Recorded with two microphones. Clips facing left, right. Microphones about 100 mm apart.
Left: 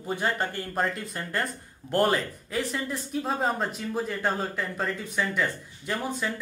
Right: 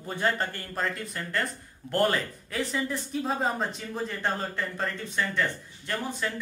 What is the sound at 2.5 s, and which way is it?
Speech, centre (ahead or behind).